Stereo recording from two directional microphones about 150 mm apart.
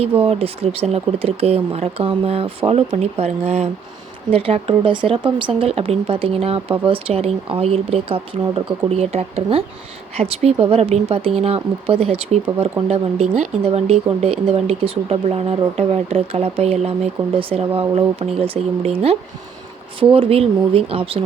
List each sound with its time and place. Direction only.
0.2 s a woman's voice: 40° right (ahead or behind)
20.1 s a woman's voice: 40° right (ahead or behind)